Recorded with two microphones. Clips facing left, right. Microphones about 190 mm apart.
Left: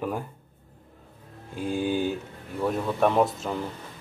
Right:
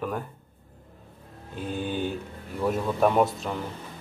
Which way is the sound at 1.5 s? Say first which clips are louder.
Left 4 dB; 10° left (ahead or behind).